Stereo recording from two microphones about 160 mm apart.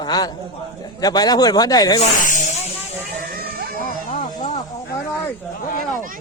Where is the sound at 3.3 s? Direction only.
70° right (ahead or behind).